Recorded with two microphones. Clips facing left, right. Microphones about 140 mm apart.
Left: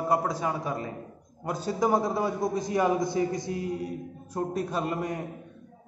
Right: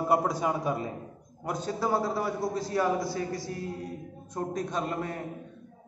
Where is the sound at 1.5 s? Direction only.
10° left (ahead or behind).